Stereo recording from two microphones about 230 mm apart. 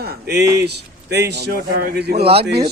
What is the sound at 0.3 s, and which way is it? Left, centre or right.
Speech, right.